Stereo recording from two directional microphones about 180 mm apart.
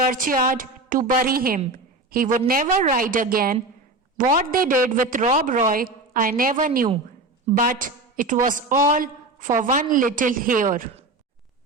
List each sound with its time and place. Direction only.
0.0 s a man's voice: 50° right (ahead or behind)